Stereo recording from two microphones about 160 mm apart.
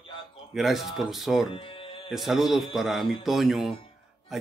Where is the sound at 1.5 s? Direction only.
35° left (ahead or behind).